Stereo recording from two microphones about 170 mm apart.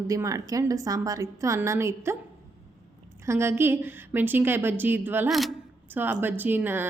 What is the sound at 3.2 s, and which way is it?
A woman's voice, 15° right (ahead or behind).